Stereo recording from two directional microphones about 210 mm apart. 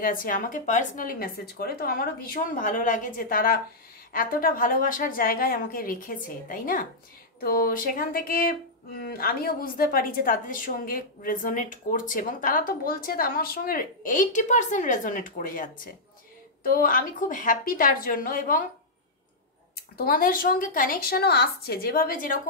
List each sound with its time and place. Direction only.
0.0 s a woman's voice: 40° left (ahead or behind)
20.0 s speech: 45° left (ahead or behind)